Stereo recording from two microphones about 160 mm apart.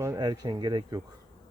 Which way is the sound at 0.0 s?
20° right (ahead or behind).